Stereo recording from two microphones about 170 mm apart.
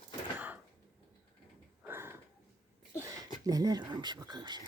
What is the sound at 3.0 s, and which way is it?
Speech, 20° right (ahead or behind).